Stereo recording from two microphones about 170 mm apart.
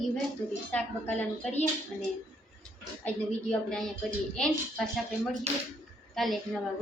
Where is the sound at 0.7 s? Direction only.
10° left (ahead or behind).